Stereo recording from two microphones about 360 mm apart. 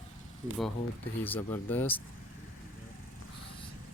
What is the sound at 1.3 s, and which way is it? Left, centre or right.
Speech, centre.